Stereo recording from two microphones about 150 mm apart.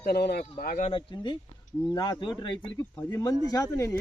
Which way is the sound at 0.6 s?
70° left (ahead or behind).